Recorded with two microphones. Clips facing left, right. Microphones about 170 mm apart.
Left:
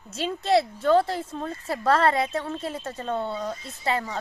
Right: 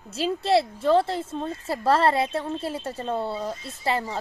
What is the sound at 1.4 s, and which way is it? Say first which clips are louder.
Speech: right 1 dB; 5° right (ahead or behind).